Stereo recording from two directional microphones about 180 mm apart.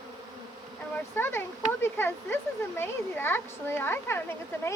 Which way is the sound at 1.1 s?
10° left (ahead or behind).